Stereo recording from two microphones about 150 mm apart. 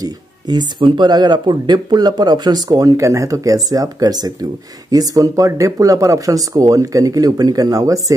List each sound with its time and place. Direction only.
0.0 s speech: 25° right (ahead or behind)